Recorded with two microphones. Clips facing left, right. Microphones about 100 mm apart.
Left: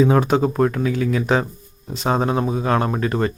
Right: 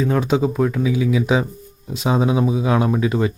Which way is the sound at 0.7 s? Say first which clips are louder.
Right 2 dB; 5° right (ahead or behind).